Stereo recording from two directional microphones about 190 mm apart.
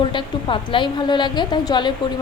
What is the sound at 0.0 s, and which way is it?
A woman's voice, 25° left (ahead or behind).